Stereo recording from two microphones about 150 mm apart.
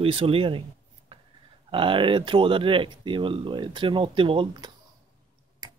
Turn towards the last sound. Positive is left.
turn(degrees=-35)  # may be behind; listen again after turning